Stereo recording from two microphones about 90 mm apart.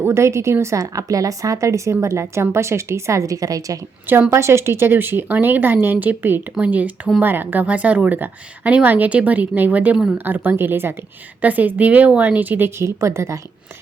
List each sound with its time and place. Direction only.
0.0 s a woman's voice: 30° right (ahead or behind)